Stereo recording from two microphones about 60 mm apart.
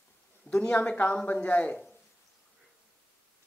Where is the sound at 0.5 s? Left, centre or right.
Centre.